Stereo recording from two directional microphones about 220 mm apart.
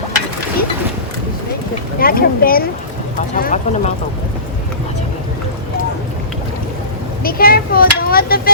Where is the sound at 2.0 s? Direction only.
40° left (ahead or behind).